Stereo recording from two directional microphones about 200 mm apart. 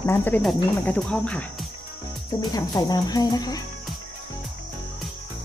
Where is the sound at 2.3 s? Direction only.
20° left (ahead or behind).